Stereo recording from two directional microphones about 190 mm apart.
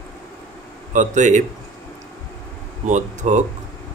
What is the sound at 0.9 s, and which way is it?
Speech, 40° right (ahead or behind).